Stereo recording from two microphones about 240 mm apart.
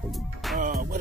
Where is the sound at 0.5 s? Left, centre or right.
Right.